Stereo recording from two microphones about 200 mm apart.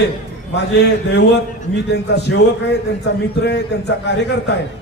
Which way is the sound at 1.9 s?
55° left (ahead or behind).